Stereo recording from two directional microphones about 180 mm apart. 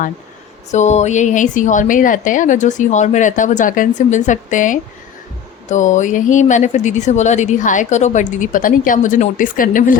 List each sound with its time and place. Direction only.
0.7 s speech: 40° left (ahead or behind)